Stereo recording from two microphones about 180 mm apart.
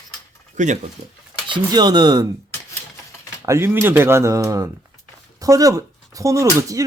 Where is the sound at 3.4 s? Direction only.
15° right (ahead or behind).